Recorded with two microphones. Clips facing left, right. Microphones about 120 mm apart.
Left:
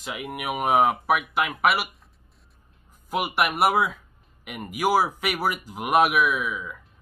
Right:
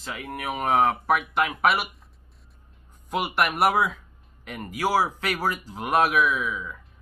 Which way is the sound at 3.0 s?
5° left (ahead or behind).